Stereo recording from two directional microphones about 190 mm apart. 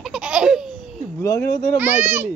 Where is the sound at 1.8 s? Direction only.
10° right (ahead or behind).